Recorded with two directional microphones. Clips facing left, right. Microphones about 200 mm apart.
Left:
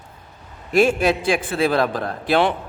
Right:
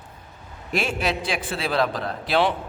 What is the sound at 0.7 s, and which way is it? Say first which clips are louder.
A man's voice: left 8 dB; 50° left (ahead or behind).